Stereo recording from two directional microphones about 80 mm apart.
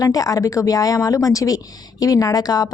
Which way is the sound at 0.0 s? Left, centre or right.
Left.